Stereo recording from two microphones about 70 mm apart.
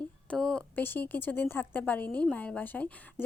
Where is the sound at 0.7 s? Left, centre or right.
Left.